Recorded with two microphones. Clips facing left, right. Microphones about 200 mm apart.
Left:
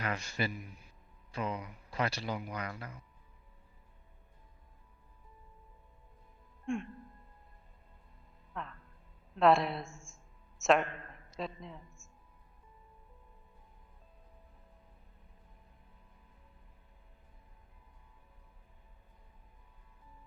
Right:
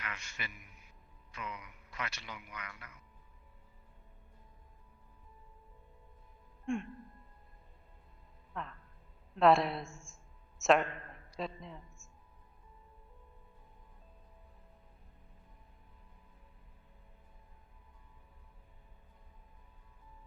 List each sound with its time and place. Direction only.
0.0 s a man's voice: 35° left (ahead or behind)
6.7 s music: centre (ahead or behind)
8.5 s music: centre (ahead or behind)
9.3 s a woman's voice: centre (ahead or behind)